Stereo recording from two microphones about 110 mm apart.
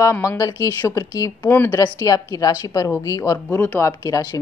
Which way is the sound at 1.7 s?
30° left (ahead or behind).